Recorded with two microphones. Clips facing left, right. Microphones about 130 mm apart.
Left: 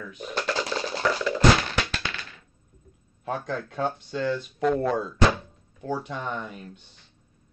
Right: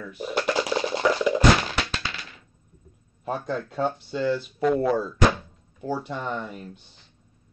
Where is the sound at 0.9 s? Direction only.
15° right (ahead or behind).